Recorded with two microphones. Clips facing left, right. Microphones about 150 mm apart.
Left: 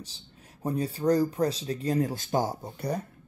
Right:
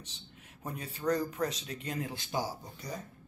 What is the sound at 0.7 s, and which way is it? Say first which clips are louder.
Speech: left 7 dB; 30° left (ahead or behind).